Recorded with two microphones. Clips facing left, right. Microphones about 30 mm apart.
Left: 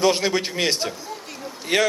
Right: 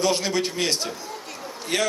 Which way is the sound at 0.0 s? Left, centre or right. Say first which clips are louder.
Left 3 dB; centre.